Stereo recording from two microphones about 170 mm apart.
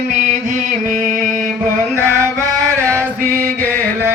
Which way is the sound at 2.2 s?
15° right (ahead or behind).